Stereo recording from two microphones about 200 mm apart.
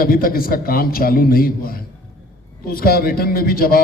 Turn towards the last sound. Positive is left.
turn(degrees=45)  # may be behind; listen again after turning